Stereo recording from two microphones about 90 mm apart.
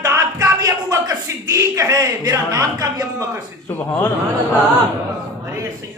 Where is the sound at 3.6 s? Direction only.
20° left (ahead or behind).